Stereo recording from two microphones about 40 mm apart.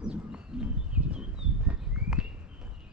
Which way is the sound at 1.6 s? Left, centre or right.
Right.